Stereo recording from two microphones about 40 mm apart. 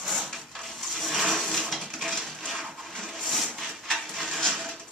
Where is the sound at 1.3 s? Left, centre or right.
Centre.